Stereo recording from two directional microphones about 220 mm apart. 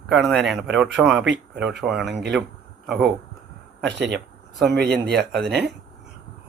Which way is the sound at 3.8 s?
50° right (ahead or behind).